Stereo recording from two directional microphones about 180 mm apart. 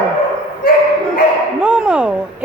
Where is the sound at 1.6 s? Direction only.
5° right (ahead or behind).